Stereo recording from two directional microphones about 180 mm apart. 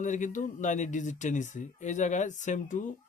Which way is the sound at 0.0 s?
45° left (ahead or behind).